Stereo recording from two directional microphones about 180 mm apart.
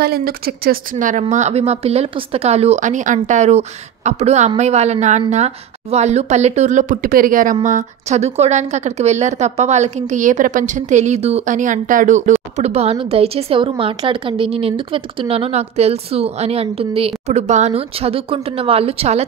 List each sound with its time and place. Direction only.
0.0 s a woman's voice: 60° right (ahead or behind); by 19.2 s 35° right (ahead or behind)